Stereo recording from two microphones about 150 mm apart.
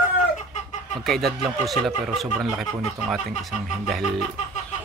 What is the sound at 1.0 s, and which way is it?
Speech, centre (ahead or behind).